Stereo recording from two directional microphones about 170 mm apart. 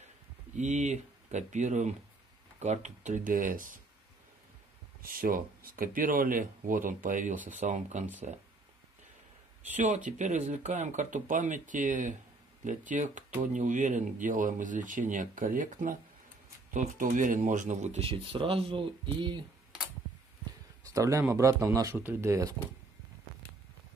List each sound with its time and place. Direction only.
0.6 s speech: 45° right (ahead or behind)
5.0 s speech: 60° right (ahead or behind); by 8.4 s 40° right (ahead or behind)
9.8 s speech: 45° right (ahead or behind); by 19.4 s 30° right (ahead or behind)
20.8 s speech: 20° right (ahead or behind)